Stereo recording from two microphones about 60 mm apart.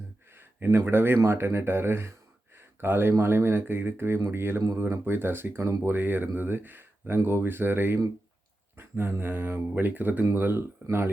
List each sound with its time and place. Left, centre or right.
0.3 s a sound: right
0.9 s speech: right
10.8 s speech: centre